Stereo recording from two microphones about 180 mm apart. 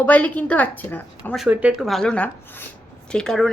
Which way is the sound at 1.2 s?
5° right (ahead or behind).